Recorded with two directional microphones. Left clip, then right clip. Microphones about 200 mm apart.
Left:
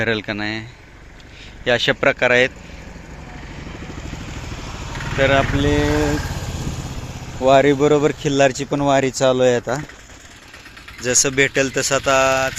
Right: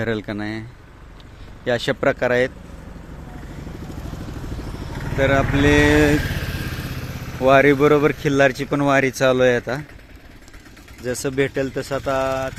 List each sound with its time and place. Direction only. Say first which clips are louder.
0.0 s speech: left 4 dB; 10° right (ahead or behind)
1.6 s speech: left 3 dB; 10° right (ahead or behind)
5.2 s speech: left 1 dB; 10° right (ahead or behind)
6.1 s vehicle: right 2 dB; 50° right (ahead or behind)
7.4 s speech: even; centre (ahead or behind)
11.0 s speech: left 5 dB; 5° left (ahead or behind)